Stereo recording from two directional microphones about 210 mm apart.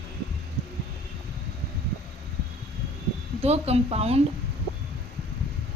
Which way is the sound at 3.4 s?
30° right (ahead or behind).